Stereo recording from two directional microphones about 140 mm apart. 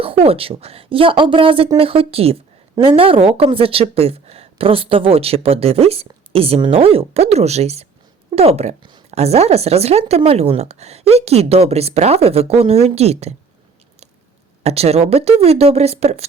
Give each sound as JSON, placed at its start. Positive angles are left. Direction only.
{"t": 0.0, "sound": "a woman's voice", "side_deg": -45}
{"t": 14.6, "sound": "a woman's voice", "side_deg": -50}